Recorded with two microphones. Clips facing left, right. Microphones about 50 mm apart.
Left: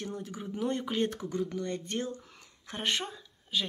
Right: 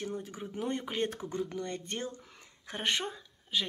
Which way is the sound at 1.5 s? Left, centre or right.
Right.